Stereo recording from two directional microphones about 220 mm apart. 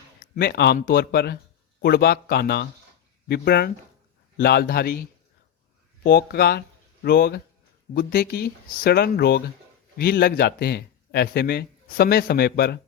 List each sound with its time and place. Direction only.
0.2 s a man's voice: 45° left (ahead or behind)